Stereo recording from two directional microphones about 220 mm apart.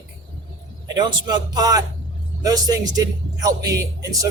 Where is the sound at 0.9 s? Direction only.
20° right (ahead or behind).